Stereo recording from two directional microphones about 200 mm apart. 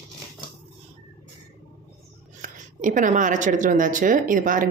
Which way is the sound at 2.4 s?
40° right (ahead or behind).